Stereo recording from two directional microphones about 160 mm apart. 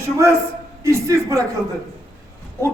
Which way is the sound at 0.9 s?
20° right (ahead or behind).